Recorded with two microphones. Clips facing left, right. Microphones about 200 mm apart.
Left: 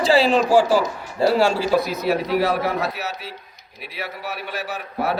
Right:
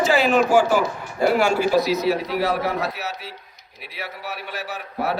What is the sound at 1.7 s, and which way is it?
A man's voice, 55° left (ahead or behind).